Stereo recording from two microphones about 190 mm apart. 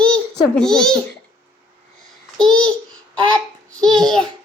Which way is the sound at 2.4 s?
25° right (ahead or behind).